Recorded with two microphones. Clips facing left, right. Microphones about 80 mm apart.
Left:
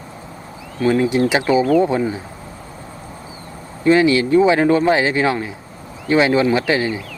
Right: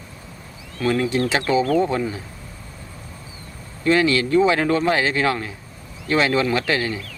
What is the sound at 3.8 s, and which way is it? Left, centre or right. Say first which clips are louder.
Speech: left 4 dB; centre.